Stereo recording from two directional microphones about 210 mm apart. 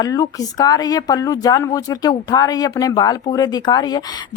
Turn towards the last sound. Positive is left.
turn(degrees=20)  # may be behind; listen again after turning